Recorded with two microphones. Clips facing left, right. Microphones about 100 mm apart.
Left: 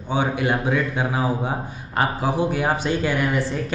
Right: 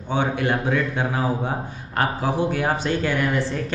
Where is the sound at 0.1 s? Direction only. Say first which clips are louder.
Even; 10° left (ahead or behind).